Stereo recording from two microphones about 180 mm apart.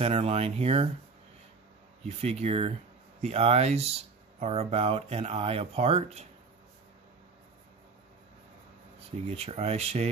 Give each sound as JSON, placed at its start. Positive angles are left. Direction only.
{"t": 0.0, "sound": "speech", "side_deg": -35}
{"t": 2.0, "sound": "speech", "side_deg": -35}
{"t": 9.3, "sound": "speech", "side_deg": -35}